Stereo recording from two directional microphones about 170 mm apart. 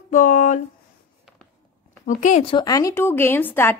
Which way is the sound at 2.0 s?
50° left (ahead or behind).